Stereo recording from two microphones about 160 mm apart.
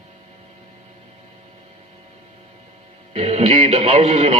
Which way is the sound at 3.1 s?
40° right (ahead or behind).